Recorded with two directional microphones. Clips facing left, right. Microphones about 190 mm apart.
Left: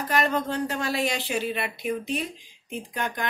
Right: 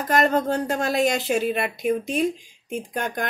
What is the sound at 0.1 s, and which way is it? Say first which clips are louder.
Speech: right 5 dB; 45° right (ahead or behind).